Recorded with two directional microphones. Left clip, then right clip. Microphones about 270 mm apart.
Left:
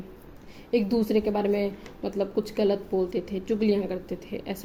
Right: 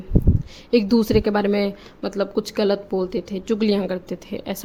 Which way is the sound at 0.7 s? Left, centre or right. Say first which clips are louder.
Right 6 dB; right.